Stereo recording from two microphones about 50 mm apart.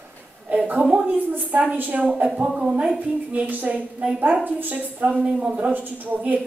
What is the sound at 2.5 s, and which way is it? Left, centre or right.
Speech, centre.